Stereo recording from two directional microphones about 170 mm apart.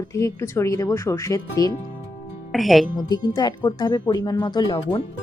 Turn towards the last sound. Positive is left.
turn(degrees=25)  # may be behind; listen again after turning